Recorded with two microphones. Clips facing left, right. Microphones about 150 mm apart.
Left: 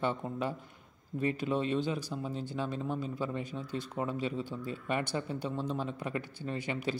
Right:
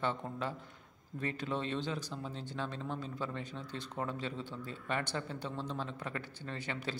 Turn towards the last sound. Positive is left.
turn(degrees=15)  # may be behind; listen again after turning